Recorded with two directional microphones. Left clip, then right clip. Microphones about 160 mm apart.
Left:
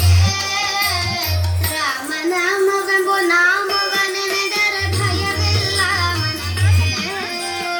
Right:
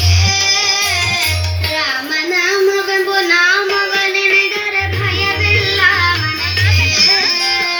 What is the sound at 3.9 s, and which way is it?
Music, 35° left (ahead or behind).